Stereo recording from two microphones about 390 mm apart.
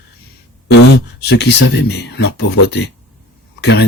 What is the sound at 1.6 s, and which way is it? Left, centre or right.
Speech, left.